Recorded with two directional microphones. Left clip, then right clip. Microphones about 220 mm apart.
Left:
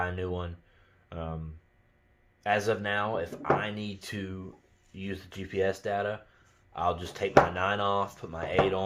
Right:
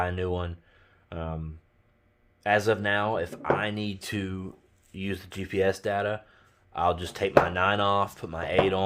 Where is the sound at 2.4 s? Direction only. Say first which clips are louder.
Right 4 dB; 45° right (ahead or behind).